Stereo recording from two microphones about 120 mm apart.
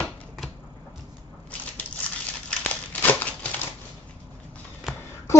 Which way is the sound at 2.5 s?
10° left (ahead or behind).